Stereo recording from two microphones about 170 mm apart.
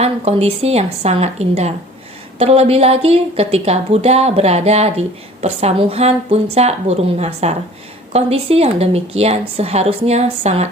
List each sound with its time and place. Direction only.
0.0 s a woman's voice: 35° right (ahead or behind)